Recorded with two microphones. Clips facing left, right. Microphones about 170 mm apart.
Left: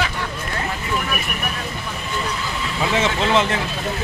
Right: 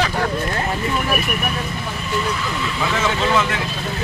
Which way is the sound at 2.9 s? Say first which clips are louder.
Left 1 dB; 25° left (ahead or behind).